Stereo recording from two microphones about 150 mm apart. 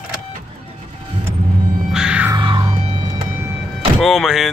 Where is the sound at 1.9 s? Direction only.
5° right (ahead or behind).